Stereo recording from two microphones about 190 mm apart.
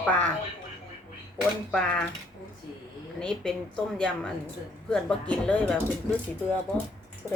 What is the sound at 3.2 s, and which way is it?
A woman's voice, 5° left (ahead or behind).